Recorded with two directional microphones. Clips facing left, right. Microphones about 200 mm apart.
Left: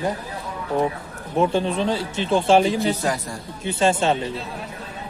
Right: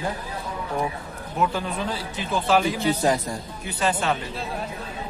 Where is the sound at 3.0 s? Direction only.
20° right (ahead or behind).